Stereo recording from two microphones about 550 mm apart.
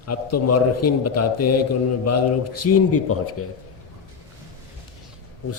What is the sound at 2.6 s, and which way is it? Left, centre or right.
Speech, left.